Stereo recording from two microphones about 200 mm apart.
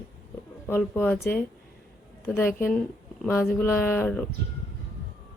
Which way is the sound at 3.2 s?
10° left (ahead or behind).